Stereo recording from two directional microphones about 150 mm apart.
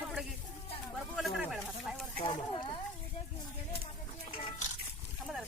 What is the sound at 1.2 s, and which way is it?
Speech, centre (ahead or behind).